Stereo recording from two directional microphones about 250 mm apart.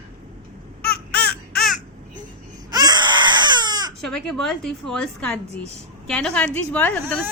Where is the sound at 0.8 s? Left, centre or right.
Centre.